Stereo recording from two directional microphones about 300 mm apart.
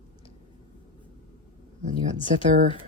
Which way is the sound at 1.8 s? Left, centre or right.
Right.